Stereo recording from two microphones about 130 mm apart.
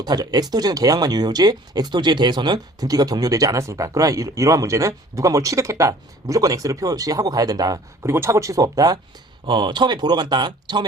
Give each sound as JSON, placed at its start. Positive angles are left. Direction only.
{"t": 0.0, "sound": "speech", "side_deg": -30}